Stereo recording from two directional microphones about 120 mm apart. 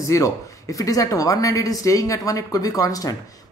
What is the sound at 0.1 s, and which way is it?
Speech, 30° left (ahead or behind).